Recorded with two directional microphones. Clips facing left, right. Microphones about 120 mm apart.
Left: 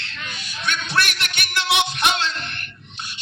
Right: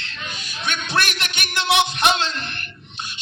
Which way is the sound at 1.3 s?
25° right (ahead or behind).